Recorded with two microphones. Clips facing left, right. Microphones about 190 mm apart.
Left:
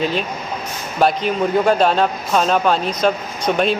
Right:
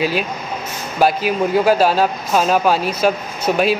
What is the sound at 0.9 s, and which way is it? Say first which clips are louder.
Speech: right 1 dB; 5° right (ahead or behind).